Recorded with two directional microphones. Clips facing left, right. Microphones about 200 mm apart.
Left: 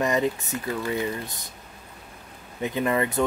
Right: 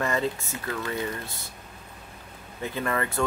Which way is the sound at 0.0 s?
15° left (ahead or behind).